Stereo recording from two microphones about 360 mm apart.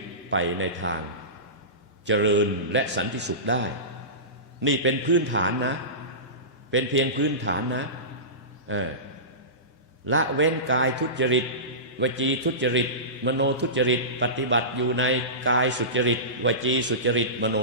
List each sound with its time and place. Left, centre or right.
0.3 s a man's voice: right
2.0 s a man's voice: right
4.6 s a man's voice: right
10.1 s a man's voice: right